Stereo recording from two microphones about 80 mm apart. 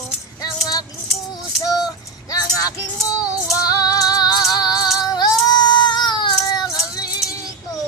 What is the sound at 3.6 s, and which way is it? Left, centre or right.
Female singing, left.